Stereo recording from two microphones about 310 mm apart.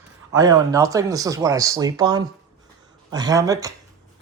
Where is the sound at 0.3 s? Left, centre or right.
Centre.